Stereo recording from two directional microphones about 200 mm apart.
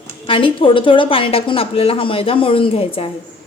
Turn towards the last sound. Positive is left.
turn(degrees=30)  # may be behind; listen again after turning